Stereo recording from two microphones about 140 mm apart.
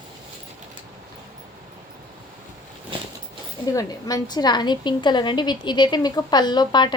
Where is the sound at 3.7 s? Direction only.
25° left (ahead or behind).